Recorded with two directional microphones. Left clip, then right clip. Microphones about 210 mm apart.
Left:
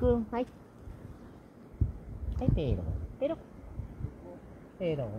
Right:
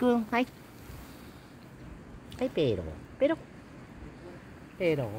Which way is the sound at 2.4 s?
40° right (ahead or behind).